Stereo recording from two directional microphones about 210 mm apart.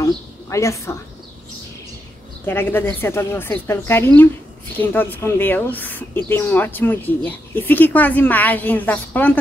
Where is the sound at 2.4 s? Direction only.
10° left (ahead or behind).